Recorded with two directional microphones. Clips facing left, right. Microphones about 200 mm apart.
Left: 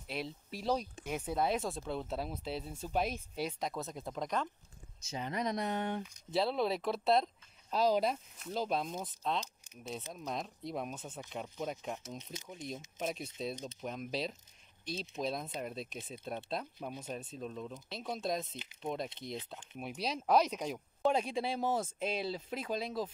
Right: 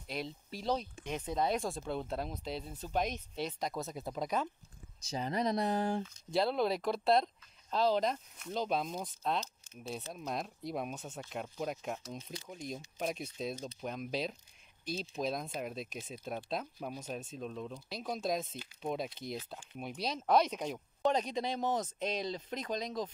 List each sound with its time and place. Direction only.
0.1 s speech: 5° left (ahead or behind)
5.0 s speech: 35° right (ahead or behind)
6.3 s speech: centre (ahead or behind)
12.2 s speech: 20° left (ahead or behind)
12.4 s speech: centre (ahead or behind)